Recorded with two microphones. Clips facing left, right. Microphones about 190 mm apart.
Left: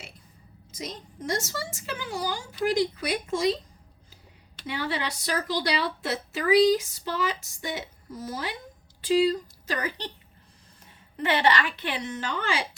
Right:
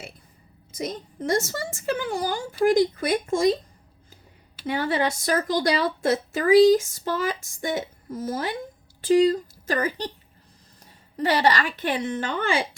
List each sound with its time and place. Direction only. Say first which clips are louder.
0.7 s a woman's voice: right 7 dB; 55° right (ahead or behind)
4.6 s a woman's voice: right 7 dB; 50° right (ahead or behind)
11.2 s a woman's voice: right 2 dB; 40° right (ahead or behind)